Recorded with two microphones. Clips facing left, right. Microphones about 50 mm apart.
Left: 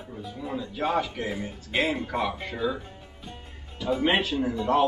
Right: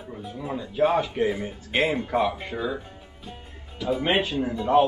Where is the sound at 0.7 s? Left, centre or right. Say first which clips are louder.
Right 6 dB; centre.